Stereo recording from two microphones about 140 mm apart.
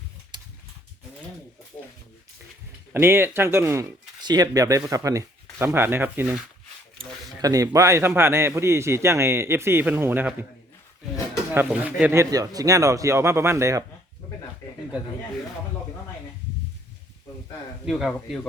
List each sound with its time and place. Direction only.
0.3 s a sound: 30° right (ahead or behind)
2.9 s a man's voice: 15° right (ahead or behind)
7.4 s a man's voice: 25° right (ahead or behind)
11.5 s speech: 10° right (ahead or behind)
12.1 s a man's voice: 25° right (ahead or behind)
17.8 s speech: 5° right (ahead or behind)